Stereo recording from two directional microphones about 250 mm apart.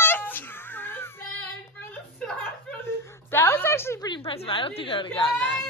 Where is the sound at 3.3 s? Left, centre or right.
Centre.